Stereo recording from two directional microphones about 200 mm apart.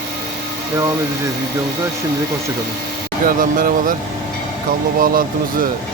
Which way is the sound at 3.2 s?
45° right (ahead or behind).